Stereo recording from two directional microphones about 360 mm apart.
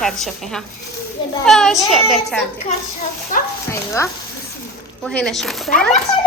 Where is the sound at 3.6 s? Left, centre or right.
Centre.